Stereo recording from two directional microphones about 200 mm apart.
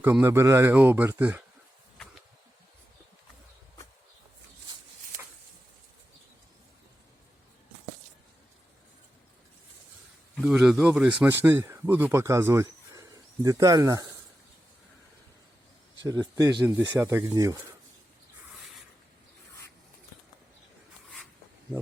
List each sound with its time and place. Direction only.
0.0 s speech: 10° right (ahead or behind)
10.3 s speech: 5° right (ahead or behind)
16.0 s speech: 15° right (ahead or behind)